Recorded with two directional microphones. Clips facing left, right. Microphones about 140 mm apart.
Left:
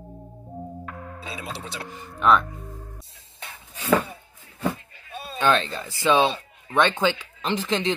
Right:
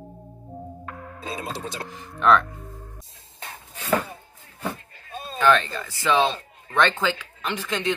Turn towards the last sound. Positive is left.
turn(degrees=25)  # may be behind; listen again after turning